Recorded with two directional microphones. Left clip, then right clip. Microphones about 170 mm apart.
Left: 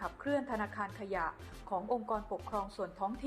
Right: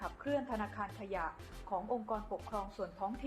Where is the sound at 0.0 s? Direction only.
20° left (ahead or behind).